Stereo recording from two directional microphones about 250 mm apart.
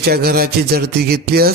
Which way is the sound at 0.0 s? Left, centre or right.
Right.